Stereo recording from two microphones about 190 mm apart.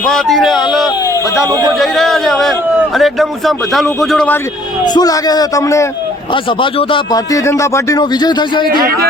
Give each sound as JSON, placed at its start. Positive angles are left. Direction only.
{"t": 0.0, "sound": "a man's voice", "side_deg": 0}
{"t": 1.5, "sound": "speech", "side_deg": -20}
{"t": 1.8, "sound": "a man's voice", "side_deg": 0}
{"t": 4.9, "sound": "speech", "side_deg": 20}
{"t": 6.3, "sound": "speech", "side_deg": 25}
{"t": 8.7, "sound": "speech", "side_deg": -50}